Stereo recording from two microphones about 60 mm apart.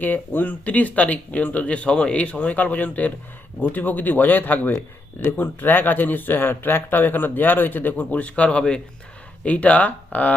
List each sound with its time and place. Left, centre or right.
0.0 s speech: left